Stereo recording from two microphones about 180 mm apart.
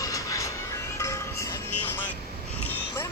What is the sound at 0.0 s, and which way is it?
Music, 20° left (ahead or behind).